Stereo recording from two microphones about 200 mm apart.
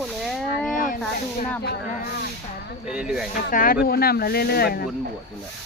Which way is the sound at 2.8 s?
5° right (ahead or behind).